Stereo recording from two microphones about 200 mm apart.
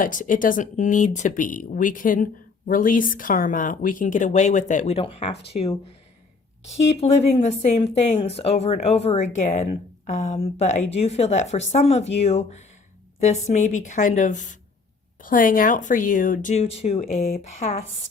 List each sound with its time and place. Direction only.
0.0 s speech: 40° left (ahead or behind)
6.9 s speech: 30° left (ahead or behind)